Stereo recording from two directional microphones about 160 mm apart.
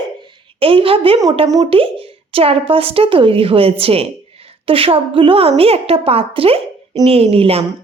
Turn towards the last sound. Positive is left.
turn(degrees=-35)  # may be behind; listen again after turning